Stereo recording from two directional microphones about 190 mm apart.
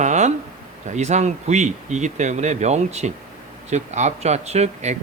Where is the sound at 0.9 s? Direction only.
40° right (ahead or behind).